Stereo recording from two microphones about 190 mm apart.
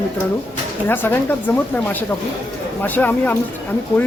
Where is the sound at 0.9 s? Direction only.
10° left (ahead or behind).